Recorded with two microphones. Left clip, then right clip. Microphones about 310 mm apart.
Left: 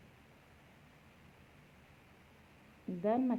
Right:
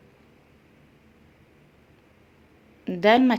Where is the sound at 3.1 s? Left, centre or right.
Right.